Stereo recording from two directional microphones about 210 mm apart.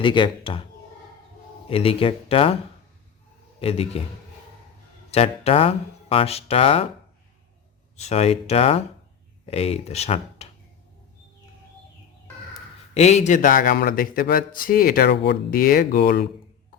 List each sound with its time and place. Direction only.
0.0 s speech: 25° left (ahead or behind)
1.7 s speech: 25° left (ahead or behind)
3.6 s speech: 25° left (ahead or behind)
5.1 s speech: 30° left (ahead or behind)
7.9 s speech: 30° left (ahead or behind)
12.9 s a man's voice: 30° left (ahead or behind); by 16.3 s 45° left (ahead or behind)